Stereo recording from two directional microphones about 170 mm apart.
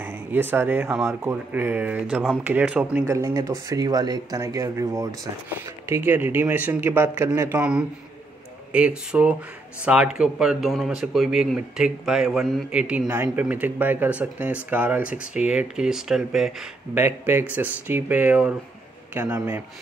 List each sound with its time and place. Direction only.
0.0 s speech: 10° right (ahead or behind)
3.2 s speech: 20° right (ahead or behind); by 16.5 s 5° right (ahead or behind)
16.9 s speech: 15° right (ahead or behind)
19.1 s speech: 20° right (ahead or behind)